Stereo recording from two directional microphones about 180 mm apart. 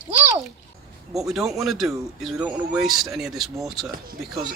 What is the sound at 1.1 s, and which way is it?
Speech, centre (ahead or behind).